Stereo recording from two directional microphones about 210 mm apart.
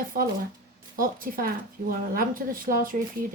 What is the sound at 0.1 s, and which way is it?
Speech, 45° right (ahead or behind).